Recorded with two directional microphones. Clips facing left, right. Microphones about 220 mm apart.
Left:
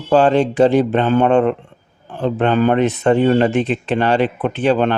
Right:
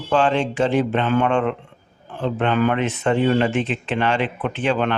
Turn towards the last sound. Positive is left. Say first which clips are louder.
# left 5 dB
turn(degrees=35)  # may be behind; listen again after turning